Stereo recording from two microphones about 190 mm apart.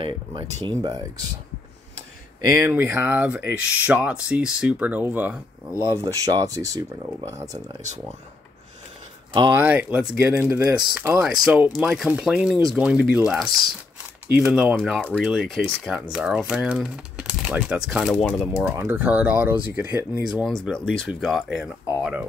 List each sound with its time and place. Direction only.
0.0 s speech: 25° right (ahead or behind)
2.5 s speech: 15° right (ahead or behind)
9.6 s speech: 10° right (ahead or behind)
18.6 s speech: 10° right (ahead or behind)
20.2 s speech: centre (ahead or behind)